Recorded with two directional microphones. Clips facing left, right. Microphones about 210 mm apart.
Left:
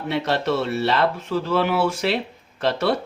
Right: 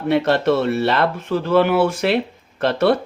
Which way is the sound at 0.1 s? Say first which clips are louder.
Right 6 dB; 55° right (ahead or behind).